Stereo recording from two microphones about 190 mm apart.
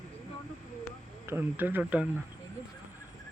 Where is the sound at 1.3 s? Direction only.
10° right (ahead or behind).